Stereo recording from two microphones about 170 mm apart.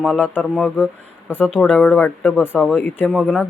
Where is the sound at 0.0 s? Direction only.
5° left (ahead or behind).